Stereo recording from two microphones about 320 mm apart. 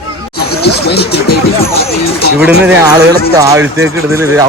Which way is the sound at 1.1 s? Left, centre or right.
Left.